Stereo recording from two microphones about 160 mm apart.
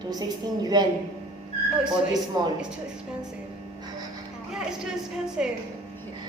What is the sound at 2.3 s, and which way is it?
Speech, 25° right (ahead or behind).